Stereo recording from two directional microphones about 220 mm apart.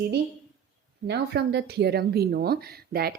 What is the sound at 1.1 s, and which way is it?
Speech, 50° right (ahead or behind).